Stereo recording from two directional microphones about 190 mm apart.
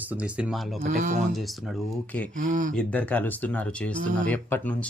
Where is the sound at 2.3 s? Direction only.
45° right (ahead or behind).